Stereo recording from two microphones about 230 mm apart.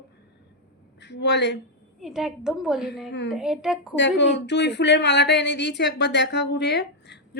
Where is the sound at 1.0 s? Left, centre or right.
Left.